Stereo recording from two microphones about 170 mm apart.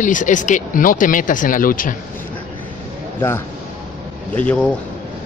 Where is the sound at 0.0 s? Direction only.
50° left (ahead or behind).